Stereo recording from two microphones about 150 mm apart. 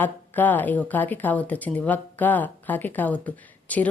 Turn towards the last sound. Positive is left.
turn(degrees=10)  # may be behind; listen again after turning